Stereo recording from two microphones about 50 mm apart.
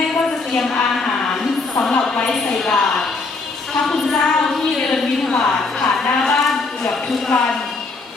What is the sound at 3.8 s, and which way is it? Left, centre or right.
Speech, centre.